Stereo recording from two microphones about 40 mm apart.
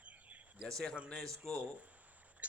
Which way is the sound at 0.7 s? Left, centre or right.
Centre.